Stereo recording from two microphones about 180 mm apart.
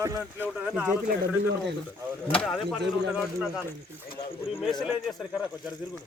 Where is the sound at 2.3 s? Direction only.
5° left (ahead or behind).